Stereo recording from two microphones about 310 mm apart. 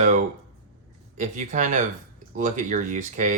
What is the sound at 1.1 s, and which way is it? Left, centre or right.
Speech, right.